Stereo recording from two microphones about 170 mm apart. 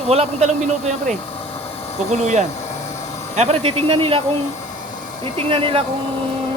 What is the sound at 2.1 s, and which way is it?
Speech, 45° right (ahead or behind).